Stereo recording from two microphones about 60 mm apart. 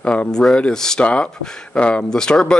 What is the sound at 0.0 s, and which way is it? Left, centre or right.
Speech, centre.